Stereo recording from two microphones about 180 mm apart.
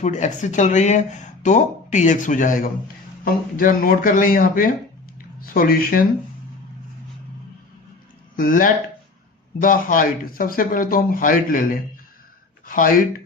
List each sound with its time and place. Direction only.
0.0 s speech: 40° left (ahead or behind)
8.4 s speech: 50° left (ahead or behind)
12.6 s speech: 50° left (ahead or behind)